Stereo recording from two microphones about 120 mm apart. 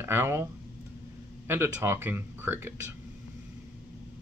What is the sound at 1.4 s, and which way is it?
Speech, 20° right (ahead or behind).